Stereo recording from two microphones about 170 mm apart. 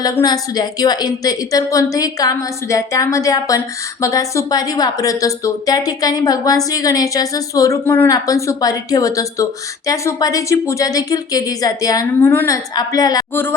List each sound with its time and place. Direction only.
0.0 s a woman's voice: 20° left (ahead or behind)